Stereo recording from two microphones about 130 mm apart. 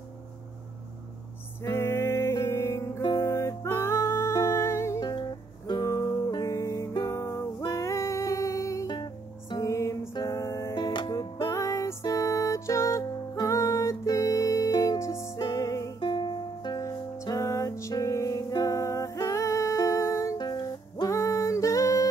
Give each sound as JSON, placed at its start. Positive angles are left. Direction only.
{"t": 1.6, "sound": "music", "side_deg": 20}
{"t": 9.7, "sound": "music", "side_deg": 25}
{"t": 10.7, "sound": "music", "side_deg": 35}
{"t": 16.0, "sound": "music", "side_deg": 35}
{"t": 20.3, "sound": "music", "side_deg": 35}